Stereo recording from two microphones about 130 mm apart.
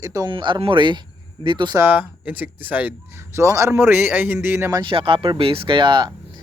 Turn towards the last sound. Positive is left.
turn(degrees=-35)  # may be behind; listen again after turning